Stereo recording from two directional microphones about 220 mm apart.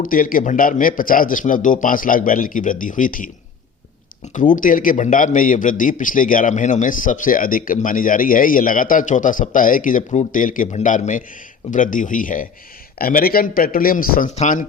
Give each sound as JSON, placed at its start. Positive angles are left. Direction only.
{"t": 0.0, "sound": "a man's voice", "side_deg": 40}